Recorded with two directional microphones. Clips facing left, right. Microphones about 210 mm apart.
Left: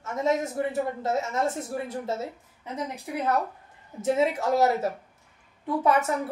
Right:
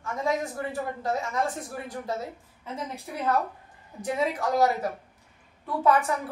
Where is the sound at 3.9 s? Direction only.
25° left (ahead or behind).